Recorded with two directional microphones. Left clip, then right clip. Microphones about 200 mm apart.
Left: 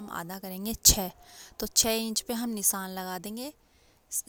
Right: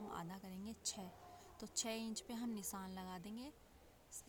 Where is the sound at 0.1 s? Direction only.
40° left (ahead or behind).